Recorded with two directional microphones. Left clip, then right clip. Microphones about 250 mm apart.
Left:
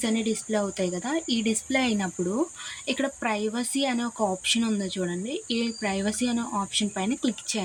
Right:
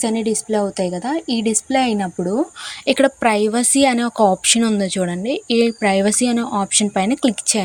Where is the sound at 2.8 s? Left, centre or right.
Right.